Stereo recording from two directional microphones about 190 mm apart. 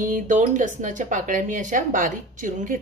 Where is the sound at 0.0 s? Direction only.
40° right (ahead or behind).